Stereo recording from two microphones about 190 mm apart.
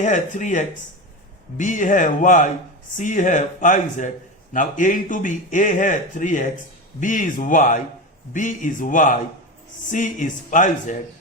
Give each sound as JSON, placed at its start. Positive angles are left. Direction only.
{"t": 0.0, "sound": "a man's voice", "side_deg": 40}